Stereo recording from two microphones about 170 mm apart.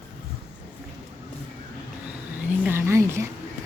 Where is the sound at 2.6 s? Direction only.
15° right (ahead or behind).